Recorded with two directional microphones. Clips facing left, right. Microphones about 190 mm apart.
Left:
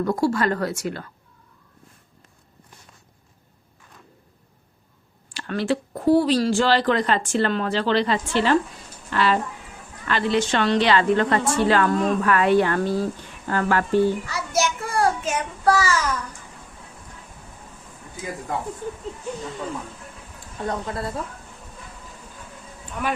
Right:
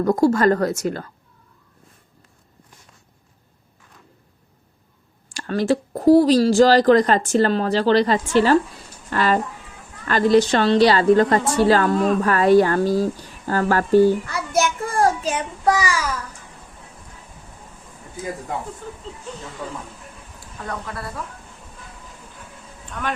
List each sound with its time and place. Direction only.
0.0 s a woman's voice: 45° right (ahead or behind)
5.3 s speech: 40° right (ahead or behind)
14.3 s a child's voice: 55° right (ahead or behind); by 15.4 s 35° right (ahead or behind)
15.6 s a child's voice: 15° right (ahead or behind)
18.8 s speech: 15° left (ahead or behind)
20.7 s a woman's voice: 25° left (ahead or behind)
22.9 s speech: 10° left (ahead or behind)